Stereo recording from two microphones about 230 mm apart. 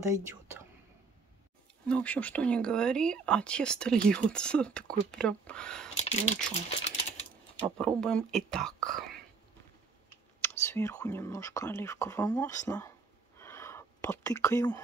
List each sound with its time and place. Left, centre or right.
1.9 s speech: centre
5.9 s speech: left
7.8 s speech: centre
10.4 s speech: centre
13.4 s a sound: centre